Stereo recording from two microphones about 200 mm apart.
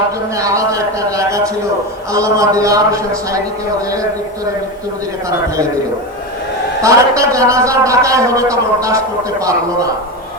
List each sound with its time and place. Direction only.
0.3 s a sound: 15° right (ahead or behind)
2.1 s a man's voice: 15° right (ahead or behind)
6.8 s a man's voice: 15° right (ahead or behind)